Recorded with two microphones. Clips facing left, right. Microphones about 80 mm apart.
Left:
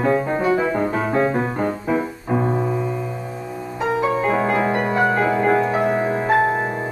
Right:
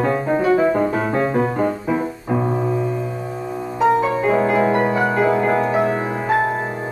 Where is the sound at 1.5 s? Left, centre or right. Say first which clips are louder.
Right 1 dB; centre.